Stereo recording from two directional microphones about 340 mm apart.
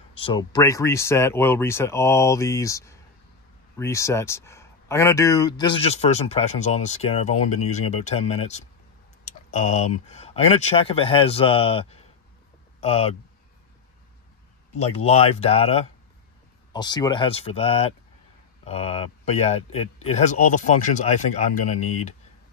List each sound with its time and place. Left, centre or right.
0.1 s speech: centre
14.7 s speech: centre